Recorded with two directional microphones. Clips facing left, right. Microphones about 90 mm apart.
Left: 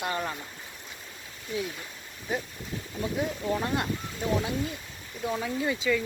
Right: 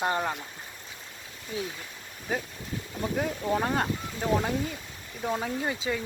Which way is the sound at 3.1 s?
45° right (ahead or behind).